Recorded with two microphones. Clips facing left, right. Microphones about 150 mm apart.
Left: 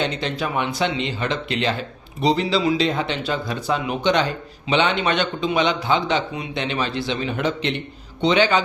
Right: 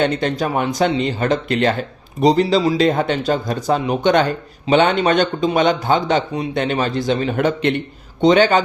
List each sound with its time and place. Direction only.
0.0 s speech: 50° right (ahead or behind)